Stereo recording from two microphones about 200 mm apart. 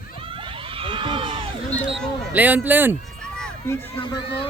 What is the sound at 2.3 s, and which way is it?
Speech, 10° right (ahead or behind).